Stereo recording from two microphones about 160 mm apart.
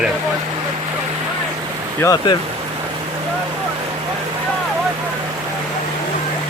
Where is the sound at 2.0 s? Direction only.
20° left (ahead or behind).